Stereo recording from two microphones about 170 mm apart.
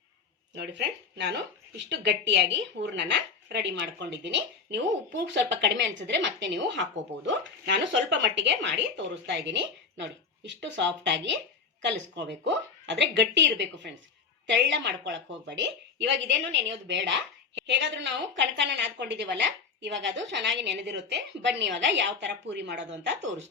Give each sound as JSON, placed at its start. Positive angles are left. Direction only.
{"t": 0.5, "sound": "speech", "side_deg": -90}